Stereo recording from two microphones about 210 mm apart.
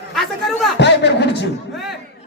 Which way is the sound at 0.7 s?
55° left (ahead or behind).